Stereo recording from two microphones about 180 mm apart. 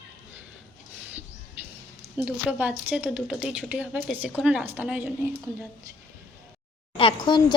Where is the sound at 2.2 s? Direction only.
10° right (ahead or behind).